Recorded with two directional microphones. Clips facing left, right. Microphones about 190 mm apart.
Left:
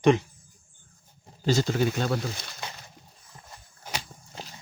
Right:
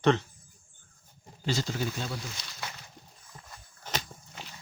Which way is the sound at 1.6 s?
65° left (ahead or behind).